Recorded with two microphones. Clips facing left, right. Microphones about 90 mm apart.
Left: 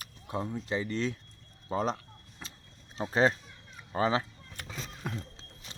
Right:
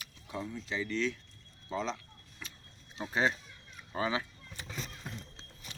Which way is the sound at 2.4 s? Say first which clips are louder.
Left 1 dB; 30° left (ahead or behind).